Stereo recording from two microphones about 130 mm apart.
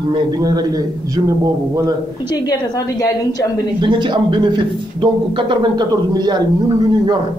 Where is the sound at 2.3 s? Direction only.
30° left (ahead or behind).